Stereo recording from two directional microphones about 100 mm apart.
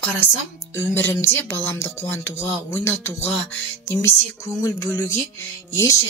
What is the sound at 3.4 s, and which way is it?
Music, 25° left (ahead or behind).